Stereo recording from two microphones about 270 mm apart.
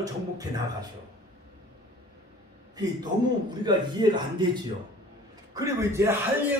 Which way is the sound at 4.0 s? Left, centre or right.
Centre.